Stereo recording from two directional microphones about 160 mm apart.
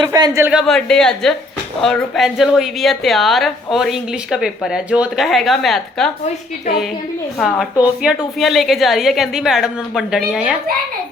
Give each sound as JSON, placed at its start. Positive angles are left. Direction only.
{"t": 0.0, "sound": "speech", "side_deg": -25}
{"t": 0.5, "sound": "a woman's voice", "side_deg": 0}
{"t": 7.3, "sound": "a woman's voice", "side_deg": 0}